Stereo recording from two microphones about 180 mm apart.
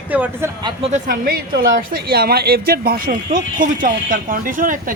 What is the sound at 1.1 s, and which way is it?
A woman's voice, 60° right (ahead or behind).